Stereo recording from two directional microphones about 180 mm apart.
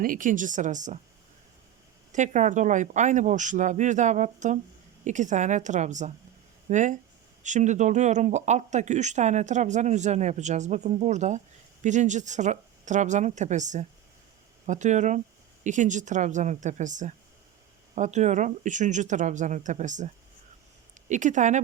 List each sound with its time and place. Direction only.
0.0 s speech: 50° right (ahead or behind)
2.1 s speech: 45° right (ahead or behind)
21.1 s speech: 45° right (ahead or behind)